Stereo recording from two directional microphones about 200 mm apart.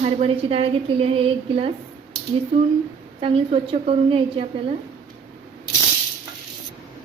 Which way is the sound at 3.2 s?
30° right (ahead or behind).